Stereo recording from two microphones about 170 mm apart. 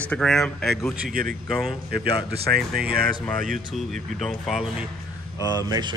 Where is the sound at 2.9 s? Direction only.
60° right (ahead or behind).